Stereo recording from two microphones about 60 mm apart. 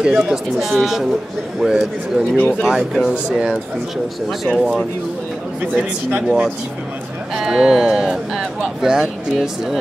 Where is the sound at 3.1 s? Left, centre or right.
Centre.